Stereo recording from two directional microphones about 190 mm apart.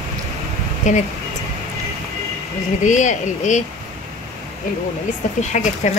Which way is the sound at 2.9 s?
40° left (ahead or behind).